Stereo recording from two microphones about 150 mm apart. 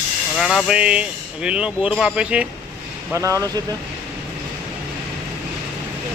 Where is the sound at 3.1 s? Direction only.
20° right (ahead or behind).